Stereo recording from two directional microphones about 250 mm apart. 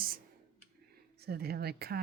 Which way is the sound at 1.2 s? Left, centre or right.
Right.